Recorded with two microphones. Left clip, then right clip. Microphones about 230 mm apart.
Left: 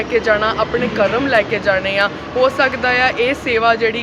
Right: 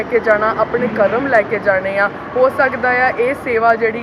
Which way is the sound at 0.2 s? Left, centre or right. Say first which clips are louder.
Right 2 dB; centre.